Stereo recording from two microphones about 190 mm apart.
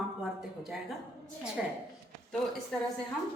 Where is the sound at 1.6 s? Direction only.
Centre (ahead or behind).